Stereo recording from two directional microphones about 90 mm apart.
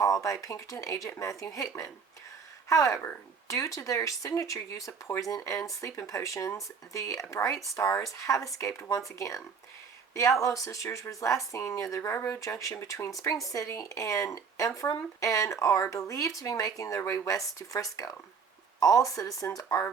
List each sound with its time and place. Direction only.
0.0 s speech: 35° left (ahead or behind)
10.4 s speech: 40° left (ahead or behind)